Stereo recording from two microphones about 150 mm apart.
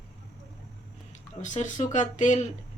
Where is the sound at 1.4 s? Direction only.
55° left (ahead or behind).